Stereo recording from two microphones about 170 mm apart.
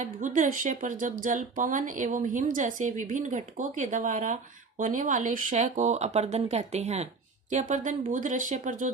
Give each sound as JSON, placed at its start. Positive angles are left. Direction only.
{"t": 0.0, "sound": "speech", "side_deg": -50}